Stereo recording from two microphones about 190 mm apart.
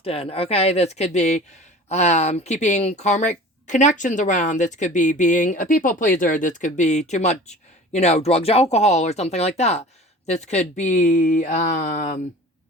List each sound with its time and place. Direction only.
0.0 s speech: 30° left (ahead or behind)